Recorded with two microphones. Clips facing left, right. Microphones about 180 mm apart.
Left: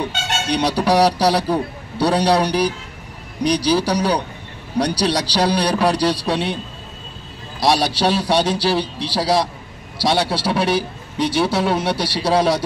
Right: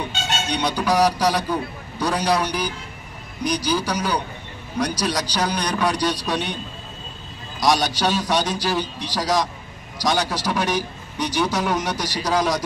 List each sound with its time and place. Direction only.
0.5 s a man's voice: 35° left (ahead or behind)
7.6 s a man's voice: 30° left (ahead or behind)